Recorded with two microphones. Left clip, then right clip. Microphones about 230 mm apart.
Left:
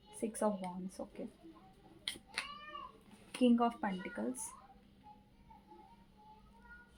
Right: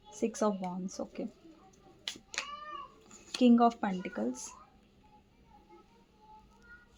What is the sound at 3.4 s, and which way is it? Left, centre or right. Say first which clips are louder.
Speech: right 6 dB; right.